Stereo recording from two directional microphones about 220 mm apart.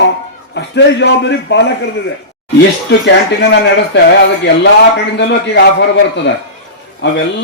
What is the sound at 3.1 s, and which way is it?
Speech, 50° left (ahead or behind).